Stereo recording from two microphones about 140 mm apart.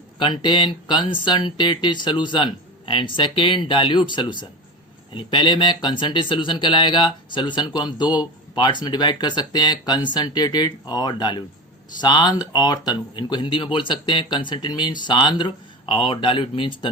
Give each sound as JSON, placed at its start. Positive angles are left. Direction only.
{"t": 0.2, "sound": "speech", "side_deg": 35}